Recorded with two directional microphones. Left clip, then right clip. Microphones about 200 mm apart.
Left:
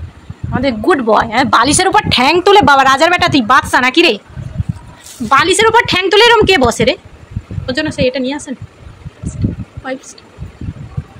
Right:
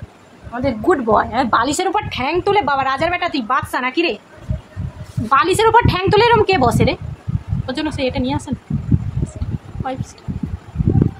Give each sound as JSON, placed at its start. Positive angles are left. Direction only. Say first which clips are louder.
{"t": 0.6, "sound": "a woman's voice", "louder": "left 4 dB", "side_deg": 10}
{"t": 5.3, "sound": "a woman's voice", "louder": "left 3 dB", "side_deg": 15}
{"t": 7.6, "sound": "a woman's voice", "louder": "left 6 dB", "side_deg": 0}